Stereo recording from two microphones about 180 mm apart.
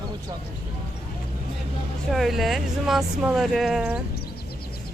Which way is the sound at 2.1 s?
Centre (ahead or behind).